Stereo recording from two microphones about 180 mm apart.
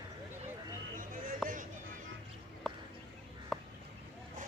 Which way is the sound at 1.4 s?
45° right (ahead or behind).